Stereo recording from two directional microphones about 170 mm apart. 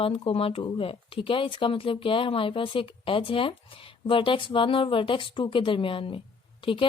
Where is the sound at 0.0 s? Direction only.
35° left (ahead or behind).